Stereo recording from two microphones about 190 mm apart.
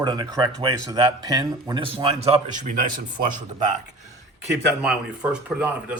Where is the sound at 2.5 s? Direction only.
45° right (ahead or behind).